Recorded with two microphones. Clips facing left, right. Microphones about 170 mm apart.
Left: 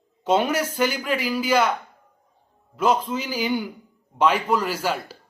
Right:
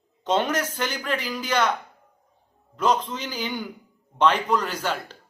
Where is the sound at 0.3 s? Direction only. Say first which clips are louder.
Left 3 dB; 10° left (ahead or behind).